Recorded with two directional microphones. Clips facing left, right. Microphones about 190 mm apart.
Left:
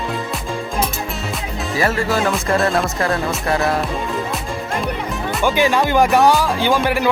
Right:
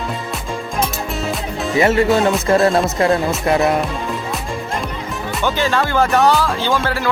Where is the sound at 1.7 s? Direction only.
20° right (ahead or behind).